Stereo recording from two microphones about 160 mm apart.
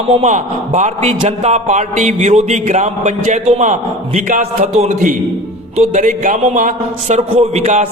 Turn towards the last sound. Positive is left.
turn(degrees=-45)  # may be behind; listen again after turning